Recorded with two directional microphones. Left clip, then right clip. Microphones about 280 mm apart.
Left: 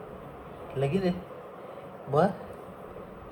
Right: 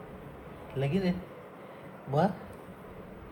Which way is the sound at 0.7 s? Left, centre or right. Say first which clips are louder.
Left 3 dB; centre.